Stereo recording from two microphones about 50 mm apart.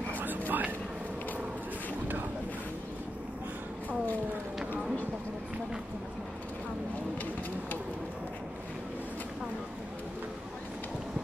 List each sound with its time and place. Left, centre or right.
0.5 s vehicle: right